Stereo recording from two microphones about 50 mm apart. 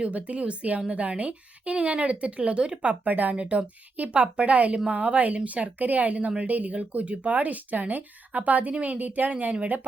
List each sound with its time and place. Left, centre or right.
0.0 s speech: right
3.3 s a woman's voice: centre